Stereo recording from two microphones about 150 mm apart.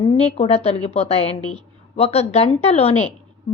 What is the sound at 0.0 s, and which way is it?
A woman's voice, 40° left (ahead or behind).